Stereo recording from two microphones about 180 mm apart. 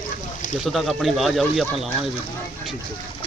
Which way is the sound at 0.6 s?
Centre (ahead or behind).